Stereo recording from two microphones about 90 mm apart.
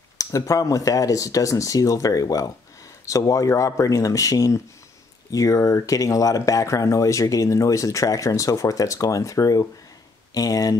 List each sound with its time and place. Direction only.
0.2 s speech: 40° left (ahead or behind)